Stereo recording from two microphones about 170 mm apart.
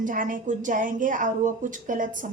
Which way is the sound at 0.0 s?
50° right (ahead or behind).